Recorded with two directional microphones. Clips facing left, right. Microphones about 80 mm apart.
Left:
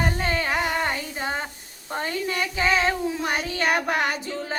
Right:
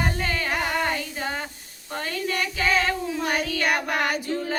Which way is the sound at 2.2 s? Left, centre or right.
Left.